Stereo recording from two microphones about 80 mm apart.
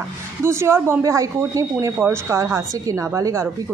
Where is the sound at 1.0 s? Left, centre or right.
Right.